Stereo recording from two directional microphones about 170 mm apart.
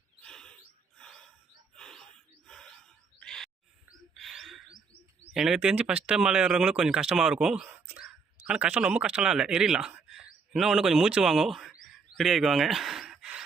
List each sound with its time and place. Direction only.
0.2 s chirp: 5° left (ahead or behind)
0.9 s bird vocalization: 5° left (ahead or behind)
1.7 s a sound: 5° left (ahead or behind)
2.5 s owl: centre (ahead or behind)
3.2 s bird: 5° left (ahead or behind)
5.3 s speech: 5° right (ahead or behind)